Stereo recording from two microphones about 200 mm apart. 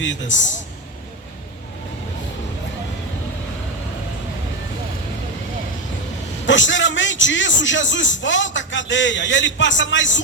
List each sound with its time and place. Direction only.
0.0 s a man's voice: 65° left (ahead or behind)
6.4 s a man's voice: 70° left (ahead or behind)